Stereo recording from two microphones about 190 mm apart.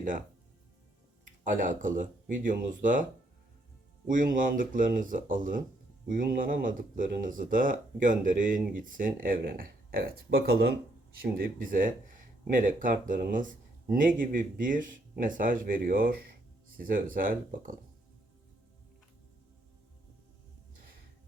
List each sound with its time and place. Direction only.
1.5 s speech: 45° right (ahead or behind)